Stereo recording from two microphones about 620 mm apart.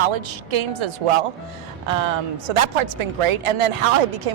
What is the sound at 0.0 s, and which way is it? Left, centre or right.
A woman's voice, right.